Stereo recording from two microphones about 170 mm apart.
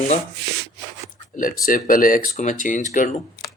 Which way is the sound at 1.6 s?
55° left (ahead or behind).